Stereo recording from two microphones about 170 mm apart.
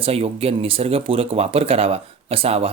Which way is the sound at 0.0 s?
35° right (ahead or behind).